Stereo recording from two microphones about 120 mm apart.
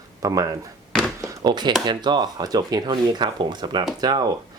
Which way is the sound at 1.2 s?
25° right (ahead or behind).